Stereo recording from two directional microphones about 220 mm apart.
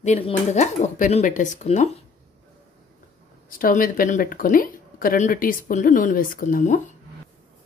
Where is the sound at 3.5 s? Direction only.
40° left (ahead or behind).